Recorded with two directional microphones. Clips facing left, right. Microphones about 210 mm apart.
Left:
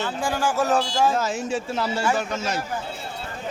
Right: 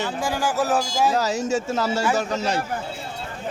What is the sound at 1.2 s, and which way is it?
A man's voice, 40° right (ahead or behind).